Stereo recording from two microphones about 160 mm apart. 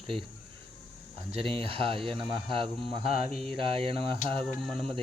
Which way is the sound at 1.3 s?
35° right (ahead or behind).